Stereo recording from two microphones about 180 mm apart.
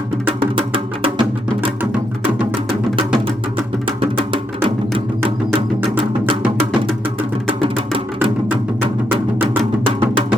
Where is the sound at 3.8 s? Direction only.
30° right (ahead or behind).